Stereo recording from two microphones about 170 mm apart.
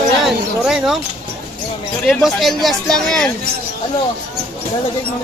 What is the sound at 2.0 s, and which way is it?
Speech, centre (ahead or behind).